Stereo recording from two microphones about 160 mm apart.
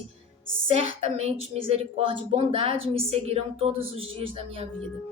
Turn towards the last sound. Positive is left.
turn(degrees=-35)  # may be behind; listen again after turning